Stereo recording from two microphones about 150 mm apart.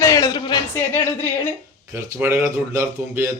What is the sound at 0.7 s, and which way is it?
Speech, 15° left (ahead or behind).